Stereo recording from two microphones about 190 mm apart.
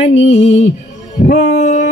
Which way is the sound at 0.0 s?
35° left (ahead or behind).